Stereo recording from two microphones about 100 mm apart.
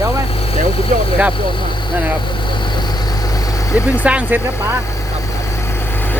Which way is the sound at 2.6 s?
50° left (ahead or behind).